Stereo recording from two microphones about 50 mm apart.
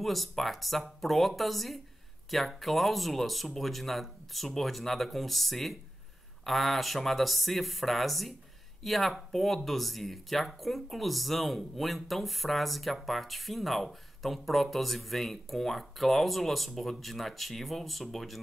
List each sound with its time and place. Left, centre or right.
0.0 s speech: centre